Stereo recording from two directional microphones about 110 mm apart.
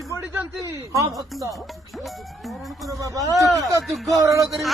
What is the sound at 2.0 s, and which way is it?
Police car, centre (ahead or behind).